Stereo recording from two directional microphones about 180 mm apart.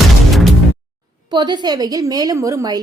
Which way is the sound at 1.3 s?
25° right (ahead or behind).